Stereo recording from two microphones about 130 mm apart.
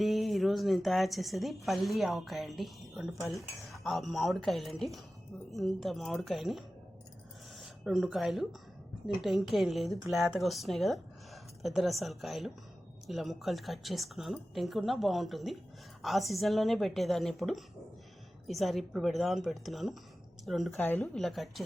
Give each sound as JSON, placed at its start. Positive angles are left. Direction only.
{"t": 0.0, "sound": "speech", "side_deg": 0}
{"t": 20.7, "sound": "a woman's voice", "side_deg": 15}
{"t": 21.0, "sound": "speech", "side_deg": 0}